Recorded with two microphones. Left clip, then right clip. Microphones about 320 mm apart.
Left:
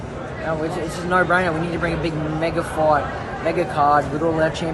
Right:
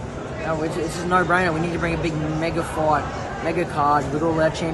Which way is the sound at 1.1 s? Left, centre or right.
Centre.